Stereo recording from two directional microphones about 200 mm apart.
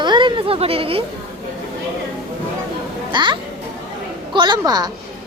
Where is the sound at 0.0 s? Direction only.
25° right (ahead or behind).